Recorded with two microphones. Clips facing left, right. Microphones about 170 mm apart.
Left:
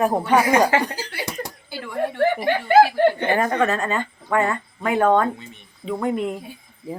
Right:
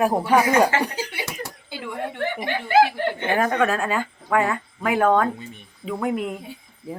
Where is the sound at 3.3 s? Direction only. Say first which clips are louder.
Left 1 dB; centre (ahead or behind).